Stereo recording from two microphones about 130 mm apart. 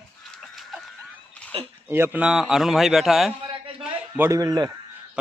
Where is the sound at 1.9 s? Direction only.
15° right (ahead or behind).